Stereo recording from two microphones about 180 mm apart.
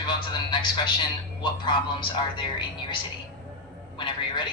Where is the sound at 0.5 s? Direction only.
25° left (ahead or behind).